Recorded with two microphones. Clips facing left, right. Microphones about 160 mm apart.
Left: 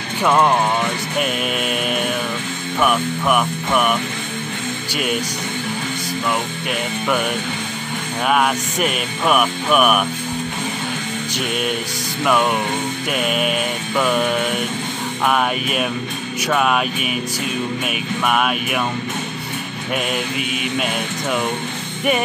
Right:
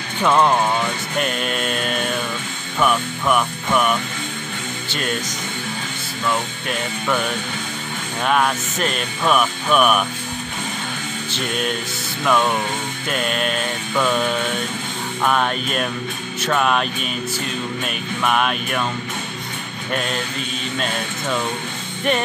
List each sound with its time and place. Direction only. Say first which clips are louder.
0.2 s music: left 1 dB; 10° left (ahead or behind)
1.1 s speech: left 1 dB; 5° left (ahead or behind)
2.8 s music: left 1 dB; 5° left (ahead or behind)
6.7 s music: left 1 dB; 10° left (ahead or behind)
8.3 s music: left 1 dB; 10° left (ahead or behind)
11.3 s speech: left 1 dB; 5° left (ahead or behind)
12.3 s music: left 1 dB; 10° left (ahead or behind)
17.8 s speech: left 1 dB; 5° left (ahead or behind)
19.9 s music: left 2 dB; 10° left (ahead or behind)